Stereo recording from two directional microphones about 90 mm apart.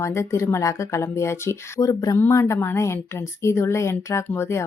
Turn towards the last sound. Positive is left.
turn(degrees=30)  # may be behind; listen again after turning